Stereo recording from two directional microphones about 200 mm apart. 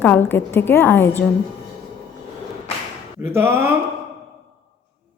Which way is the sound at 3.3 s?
10° right (ahead or behind).